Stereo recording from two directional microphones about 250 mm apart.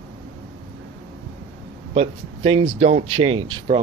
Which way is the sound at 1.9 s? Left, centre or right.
Right.